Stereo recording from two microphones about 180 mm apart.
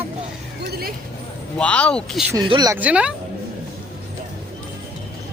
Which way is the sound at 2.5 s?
20° right (ahead or behind).